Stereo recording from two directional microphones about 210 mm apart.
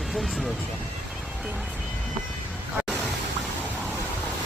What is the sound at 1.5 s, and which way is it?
Vehicle, 5° right (ahead or behind).